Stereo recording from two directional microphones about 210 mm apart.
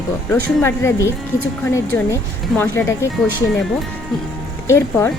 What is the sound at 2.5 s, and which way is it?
Speech, 10° left (ahead or behind).